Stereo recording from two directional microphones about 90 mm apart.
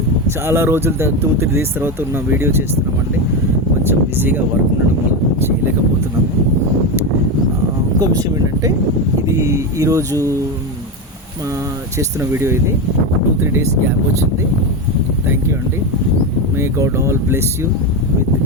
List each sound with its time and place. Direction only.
0.3 s speech: 25° right (ahead or behind)
3.8 s speech: 20° right (ahead or behind)
5.4 s a sound: 25° right (ahead or behind)
7.9 s speech: 40° right (ahead or behind)
11.9 s speech: 30° right (ahead or behind)
16.6 s speech: 35° right (ahead or behind)